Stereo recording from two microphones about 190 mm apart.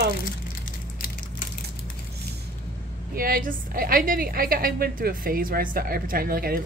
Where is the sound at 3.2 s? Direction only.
45° right (ahead or behind).